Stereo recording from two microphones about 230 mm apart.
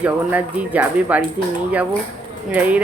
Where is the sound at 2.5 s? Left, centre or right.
Centre.